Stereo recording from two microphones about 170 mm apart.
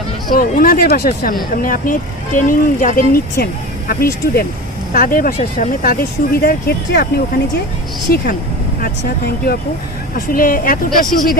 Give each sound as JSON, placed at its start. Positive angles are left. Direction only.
{"t": 0.3, "sound": "speech", "side_deg": 60}